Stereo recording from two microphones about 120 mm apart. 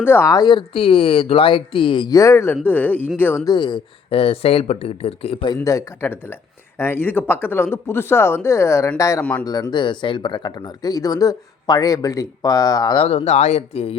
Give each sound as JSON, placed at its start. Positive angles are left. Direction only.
{"t": 0.0, "sound": "speech", "side_deg": 20}
{"t": 0.3, "sound": "speech", "side_deg": 40}
{"t": 3.4, "sound": "speech", "side_deg": 40}
{"t": 5.6, "sound": "speech", "side_deg": 25}
{"t": 13.1, "sound": "speech", "side_deg": 60}